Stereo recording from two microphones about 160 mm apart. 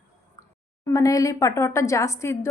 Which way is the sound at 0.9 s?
20° left (ahead or behind).